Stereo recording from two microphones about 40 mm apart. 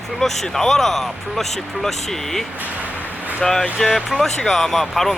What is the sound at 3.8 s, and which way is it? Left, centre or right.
Speech, centre.